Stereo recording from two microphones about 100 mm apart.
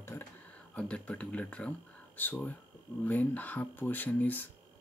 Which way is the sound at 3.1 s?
15° left (ahead or behind).